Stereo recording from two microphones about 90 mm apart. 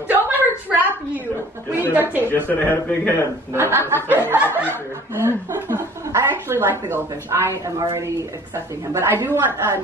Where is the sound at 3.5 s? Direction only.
25° right (ahead or behind).